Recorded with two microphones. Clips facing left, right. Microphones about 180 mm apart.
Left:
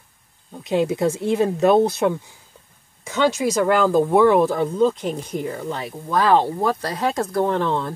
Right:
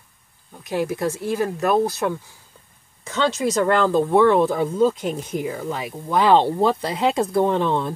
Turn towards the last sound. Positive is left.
turn(degrees=-15)  # may be behind; listen again after turning